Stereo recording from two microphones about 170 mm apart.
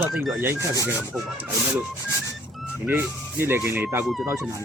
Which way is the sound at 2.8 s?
10° right (ahead or behind).